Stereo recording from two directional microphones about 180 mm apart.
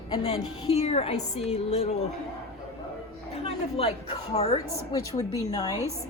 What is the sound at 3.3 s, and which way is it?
Speech, 35° left (ahead or behind).